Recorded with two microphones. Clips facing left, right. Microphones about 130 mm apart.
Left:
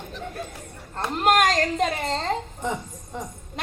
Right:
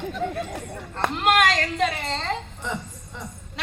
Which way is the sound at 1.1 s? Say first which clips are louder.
Left 1 dB; 45° left (ahead or behind).